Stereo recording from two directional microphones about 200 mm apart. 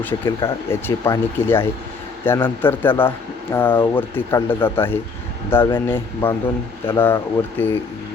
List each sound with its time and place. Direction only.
0.3 s speech: 15° left (ahead or behind)